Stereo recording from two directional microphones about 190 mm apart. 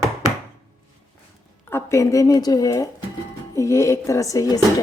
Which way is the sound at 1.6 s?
15° left (ahead or behind).